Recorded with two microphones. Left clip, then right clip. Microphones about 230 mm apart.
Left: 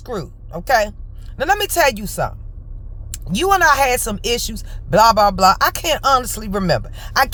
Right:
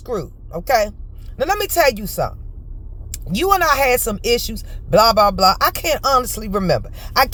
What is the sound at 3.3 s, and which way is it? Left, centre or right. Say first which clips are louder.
A man's voice: left 2 dB; centre.